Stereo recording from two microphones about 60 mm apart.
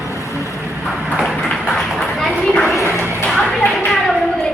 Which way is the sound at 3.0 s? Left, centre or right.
Left.